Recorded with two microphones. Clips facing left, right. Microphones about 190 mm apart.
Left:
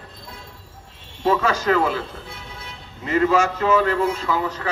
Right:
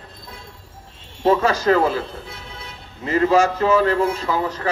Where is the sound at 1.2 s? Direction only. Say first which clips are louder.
Right 3 dB; 40° right (ahead or behind).